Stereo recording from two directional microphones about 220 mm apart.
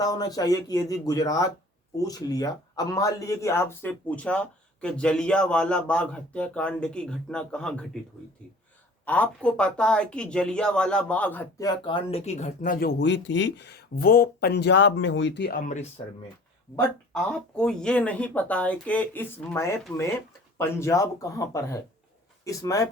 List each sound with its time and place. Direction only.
0.0 s speech: 15° left (ahead or behind)
9.0 s speech: 5° left (ahead or behind); by 15.9 s 35° left (ahead or behind)
16.7 s speech: 5° left (ahead or behind)